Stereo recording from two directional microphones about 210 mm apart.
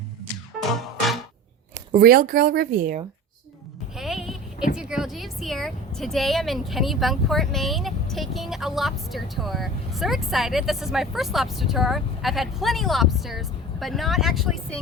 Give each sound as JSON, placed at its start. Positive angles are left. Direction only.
{"t": 0.8, "sound": "music", "side_deg": 0}
{"t": 1.9, "sound": "speech", "side_deg": -45}
{"t": 3.9, "sound": "a sound", "side_deg": 0}
{"t": 4.8, "sound": "speech", "side_deg": -5}